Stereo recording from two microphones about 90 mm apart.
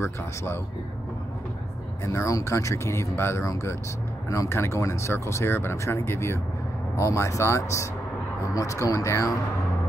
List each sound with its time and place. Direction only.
0.0 s speech: 30° left (ahead or behind)
2.0 s speech: 35° left (ahead or behind)